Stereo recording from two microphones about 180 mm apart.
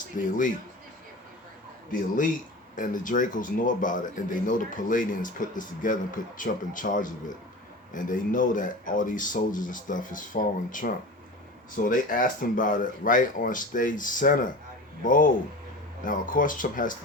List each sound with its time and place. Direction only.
0.2 s speech: 45° left (ahead or behind)
1.9 s speech: 45° left (ahead or behind)